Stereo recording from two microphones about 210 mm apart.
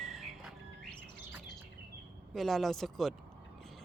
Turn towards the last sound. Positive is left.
turn(degrees=0)  # may be behind; listen again after turning